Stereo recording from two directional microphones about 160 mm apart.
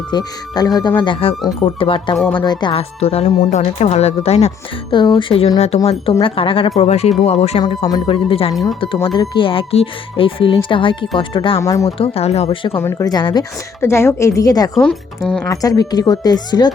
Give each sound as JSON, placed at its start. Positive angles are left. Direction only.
{"t": 0.1, "sound": "speech", "side_deg": 25}
{"t": 2.1, "sound": "speech", "side_deg": 5}
{"t": 2.4, "sound": "speech", "side_deg": 25}
{"t": 11.5, "sound": "speech", "side_deg": 20}
{"t": 11.9, "sound": "speech", "side_deg": 35}
{"t": 12.8, "sound": "a woman's voice", "side_deg": 20}
{"t": 14.8, "sound": "speech", "side_deg": 5}
{"t": 15.4, "sound": "speech", "side_deg": 20}